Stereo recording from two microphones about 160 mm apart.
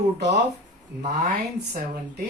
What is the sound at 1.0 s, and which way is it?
Speech, 45° right (ahead or behind).